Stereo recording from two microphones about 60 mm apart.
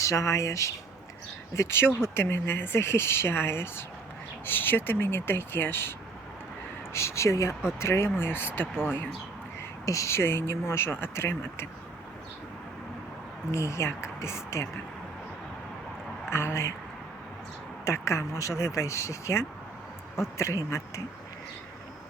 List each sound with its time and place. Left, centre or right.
0.0 s speech: left
1.5 s speech: left
6.9 s speech: left
9.8 s speech: left
13.5 s speech: left
16.3 s speech: left
17.8 s speech: left